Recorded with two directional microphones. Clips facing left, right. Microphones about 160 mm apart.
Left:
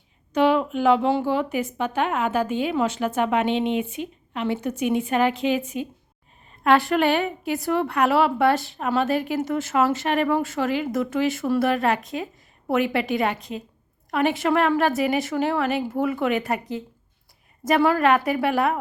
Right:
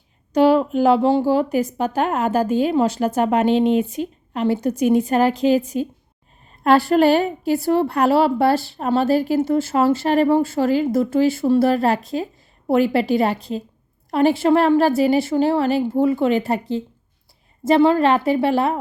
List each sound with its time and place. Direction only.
0.3 s a woman's voice: 35° right (ahead or behind)